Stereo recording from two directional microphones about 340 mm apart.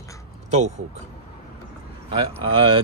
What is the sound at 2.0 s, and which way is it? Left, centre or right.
Speech, centre.